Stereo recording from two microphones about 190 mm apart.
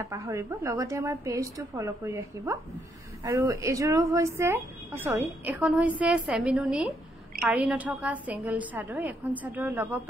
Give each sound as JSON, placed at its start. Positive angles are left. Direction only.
{"t": 0.0, "sound": "a woman's voice", "side_deg": -15}